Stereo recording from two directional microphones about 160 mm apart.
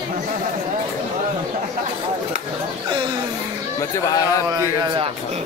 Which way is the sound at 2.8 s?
30° right (ahead or behind).